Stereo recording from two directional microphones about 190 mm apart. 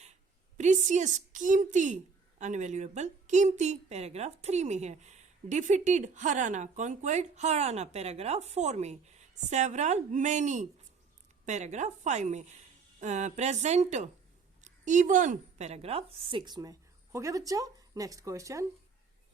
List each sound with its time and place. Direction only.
0.0 s a woman's voice: 40° right (ahead or behind); by 18.6 s 15° right (ahead or behind)